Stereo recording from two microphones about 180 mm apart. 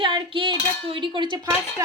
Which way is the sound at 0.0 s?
30° right (ahead or behind).